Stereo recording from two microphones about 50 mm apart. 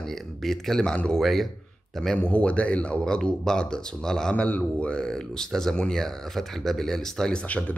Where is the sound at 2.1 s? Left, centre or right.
Left.